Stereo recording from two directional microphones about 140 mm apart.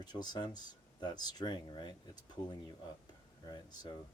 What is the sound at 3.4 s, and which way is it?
Speech, 30° left (ahead or behind).